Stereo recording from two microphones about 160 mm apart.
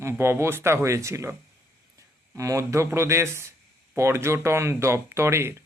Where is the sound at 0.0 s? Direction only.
15° right (ahead or behind).